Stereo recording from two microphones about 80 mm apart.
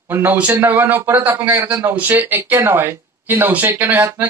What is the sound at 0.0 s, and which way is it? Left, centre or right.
Speech, right.